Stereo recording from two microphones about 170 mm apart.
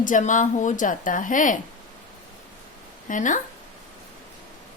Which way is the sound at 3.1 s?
50° left (ahead or behind).